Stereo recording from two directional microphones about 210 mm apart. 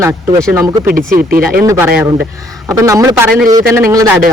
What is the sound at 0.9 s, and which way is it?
Speech, 40° right (ahead or behind).